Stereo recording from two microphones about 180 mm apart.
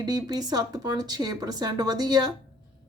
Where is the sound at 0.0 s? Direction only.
20° right (ahead or behind).